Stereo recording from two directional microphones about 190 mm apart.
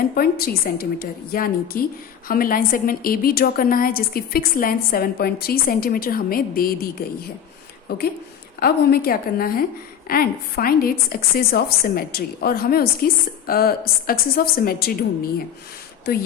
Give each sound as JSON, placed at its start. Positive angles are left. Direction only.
{"t": 0.1, "sound": "a woman's voice", "side_deg": 55}